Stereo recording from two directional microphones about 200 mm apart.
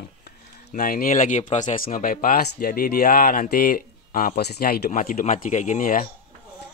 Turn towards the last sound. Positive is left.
turn(degrees=40)  # may be behind; listen again after turning